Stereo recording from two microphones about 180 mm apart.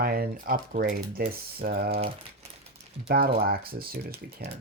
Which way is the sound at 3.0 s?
55° right (ahead or behind).